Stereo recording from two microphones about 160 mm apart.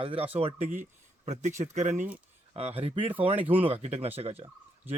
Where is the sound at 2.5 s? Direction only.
40° right (ahead or behind).